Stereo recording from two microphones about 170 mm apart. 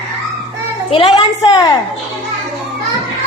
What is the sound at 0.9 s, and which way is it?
Speech, 30° left (ahead or behind).